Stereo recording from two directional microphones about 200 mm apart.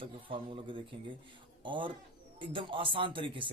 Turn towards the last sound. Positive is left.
turn(degrees=-25)  # may be behind; listen again after turning